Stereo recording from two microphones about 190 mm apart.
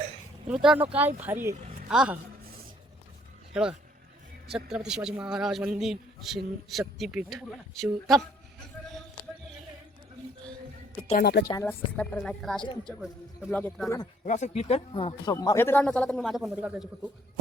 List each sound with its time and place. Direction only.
0.4 s speech: 5° right (ahead or behind)
3.5 s speech: 5° right (ahead or behind)
11.2 s speech: 60° left (ahead or behind)
11.4 s speech: 15° left (ahead or behind)
14.3 s speech: 40° left (ahead or behind); by 17.1 s 5° right (ahead or behind)